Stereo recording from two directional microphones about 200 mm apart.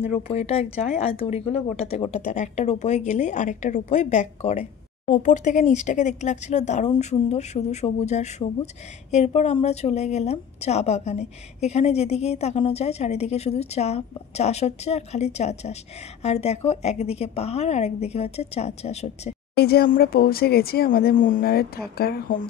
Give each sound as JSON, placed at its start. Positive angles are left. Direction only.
{"t": 0.3, "sound": "a woman's voice", "side_deg": 30}
{"t": 19.5, "sound": "speech", "side_deg": 50}